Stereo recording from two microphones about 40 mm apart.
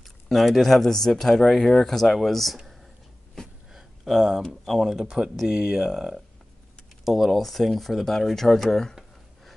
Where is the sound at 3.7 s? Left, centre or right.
Centre.